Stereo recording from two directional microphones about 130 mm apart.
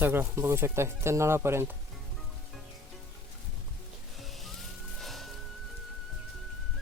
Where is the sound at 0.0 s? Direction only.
15° right (ahead or behind).